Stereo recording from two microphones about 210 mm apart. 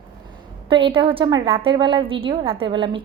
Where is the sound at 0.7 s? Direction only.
25° right (ahead or behind).